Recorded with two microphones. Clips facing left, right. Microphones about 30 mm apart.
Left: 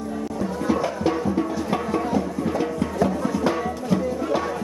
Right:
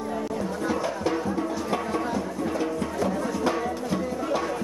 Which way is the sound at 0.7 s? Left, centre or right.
Centre.